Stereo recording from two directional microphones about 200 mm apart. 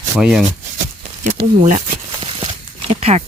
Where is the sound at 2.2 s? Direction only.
25° right (ahead or behind).